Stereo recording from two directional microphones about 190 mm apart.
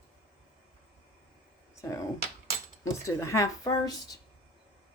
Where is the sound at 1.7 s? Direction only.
15° left (ahead or behind).